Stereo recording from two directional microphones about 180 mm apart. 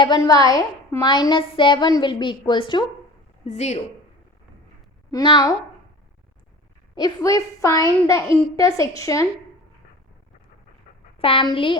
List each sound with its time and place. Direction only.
0.0 s a woman's voice: 20° left (ahead or behind)
3.4 s speech: 40° left (ahead or behind)
5.1 s a woman's voice: 25° left (ahead or behind)
6.9 s a woman's voice: 20° left (ahead or behind)
11.2 s a woman's voice: 30° left (ahead or behind)